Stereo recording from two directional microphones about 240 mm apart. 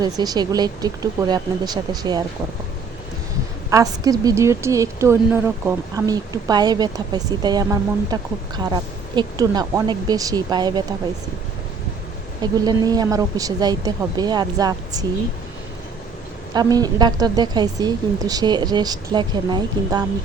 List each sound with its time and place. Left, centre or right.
0.0 s a woman's voice: centre
3.7 s a woman's voice: centre
12.4 s a woman's voice: centre
16.6 s a woman's voice: centre